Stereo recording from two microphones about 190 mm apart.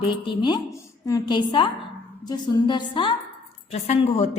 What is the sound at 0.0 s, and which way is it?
A woman's voice, 25° left (ahead or behind).